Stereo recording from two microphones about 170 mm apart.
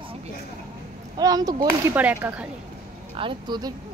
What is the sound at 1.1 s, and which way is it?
Speech, 20° right (ahead or behind).